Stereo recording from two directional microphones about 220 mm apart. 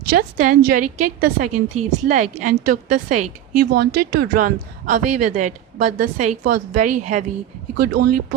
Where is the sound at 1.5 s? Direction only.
90° right.